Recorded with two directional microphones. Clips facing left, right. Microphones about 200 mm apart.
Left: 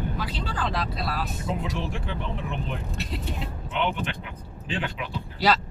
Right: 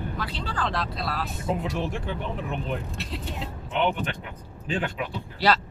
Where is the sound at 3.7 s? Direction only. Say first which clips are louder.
Right 2 dB; 45° right (ahead or behind).